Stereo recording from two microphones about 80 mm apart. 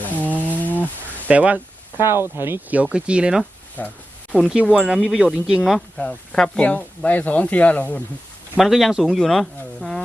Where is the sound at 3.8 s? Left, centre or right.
Left.